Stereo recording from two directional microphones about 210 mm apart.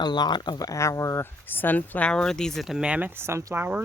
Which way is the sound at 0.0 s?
20° left (ahead or behind).